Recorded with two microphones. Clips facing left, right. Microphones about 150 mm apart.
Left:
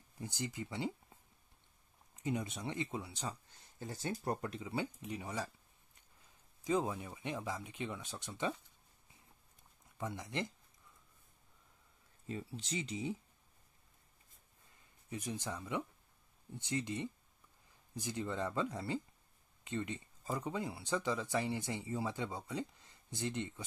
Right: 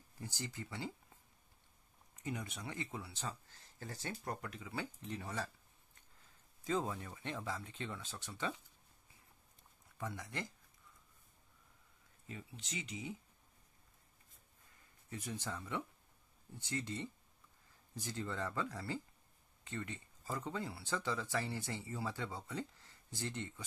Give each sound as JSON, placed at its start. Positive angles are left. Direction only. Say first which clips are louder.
{"t": 0.2, "sound": "speech", "louder": "left 4 dB", "side_deg": 20}
{"t": 2.1, "sound": "speech", "louder": "left 5 dB", "side_deg": 20}
{"t": 5.0, "sound": "speech", "louder": "left 2 dB", "side_deg": 15}
{"t": 6.6, "sound": "speech", "louder": "left 3 dB", "side_deg": 15}
{"t": 9.9, "sound": "speech", "louder": "left 4 dB", "side_deg": 20}
{"t": 12.3, "sound": "speech", "louder": "left 7 dB", "side_deg": 35}
{"t": 15.0, "sound": "speech", "louder": "left 3 dB", "side_deg": 20}